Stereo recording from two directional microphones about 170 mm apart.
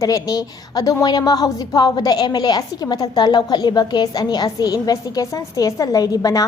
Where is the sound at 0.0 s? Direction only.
20° left (ahead or behind).